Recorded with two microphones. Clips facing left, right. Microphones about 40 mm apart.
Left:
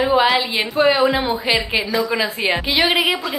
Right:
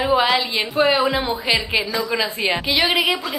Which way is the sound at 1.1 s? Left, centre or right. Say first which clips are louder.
Left 2 dB; centre.